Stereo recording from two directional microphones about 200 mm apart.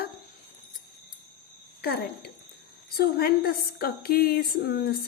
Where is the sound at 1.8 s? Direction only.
50° left (ahead or behind).